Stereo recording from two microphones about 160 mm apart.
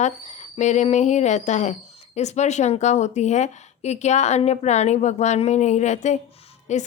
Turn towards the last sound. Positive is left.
turn(degrees=45)  # may be behind; listen again after turning